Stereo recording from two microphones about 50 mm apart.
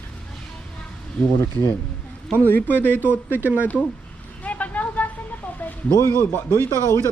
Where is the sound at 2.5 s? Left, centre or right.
Left.